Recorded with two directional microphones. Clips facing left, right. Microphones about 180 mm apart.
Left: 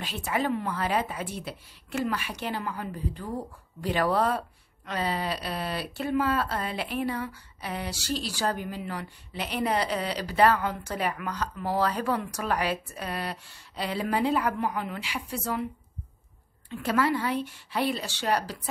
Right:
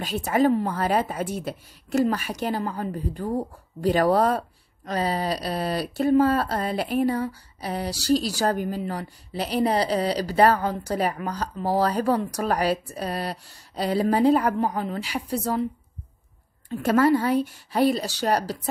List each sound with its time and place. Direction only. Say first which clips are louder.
0.0 s a woman's voice: right 8 dB; 40° right (ahead or behind)
16.6 s a woman's voice: right 6 dB; 45° right (ahead or behind)